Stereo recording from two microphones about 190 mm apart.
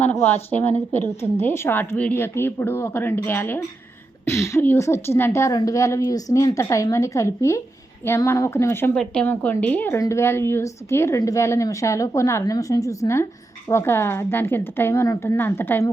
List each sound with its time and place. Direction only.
0.0 s a woman's voice: 10° left (ahead or behind)